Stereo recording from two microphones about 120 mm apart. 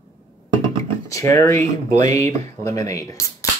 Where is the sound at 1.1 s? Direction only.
25° left (ahead or behind).